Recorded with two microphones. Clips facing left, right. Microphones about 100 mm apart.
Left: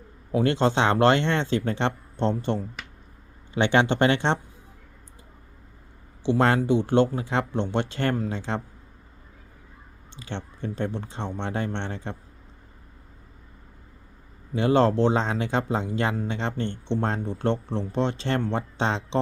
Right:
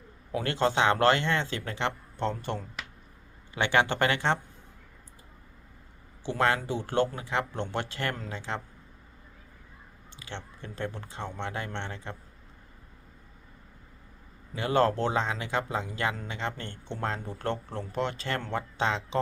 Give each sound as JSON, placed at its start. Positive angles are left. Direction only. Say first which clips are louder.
{"t": 0.3, "sound": "speech", "louder": "left 5 dB", "side_deg": 25}
{"t": 3.5, "sound": "speech", "louder": "left 4 dB", "side_deg": 25}
{"t": 6.6, "sound": "speech", "louder": "left 7 dB", "side_deg": 20}
{"t": 10.2, "sound": "speech", "louder": "left 7 dB", "side_deg": 30}
{"t": 14.5, "sound": "speech", "louder": "left 5 dB", "side_deg": 25}